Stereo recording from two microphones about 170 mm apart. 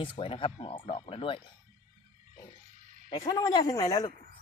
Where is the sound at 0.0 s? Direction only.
30° left (ahead or behind).